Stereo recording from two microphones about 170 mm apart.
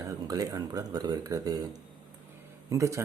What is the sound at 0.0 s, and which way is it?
Speech, 20° right (ahead or behind).